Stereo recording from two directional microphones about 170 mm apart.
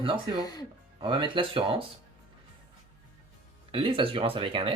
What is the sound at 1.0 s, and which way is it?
Speech, 30° right (ahead or behind).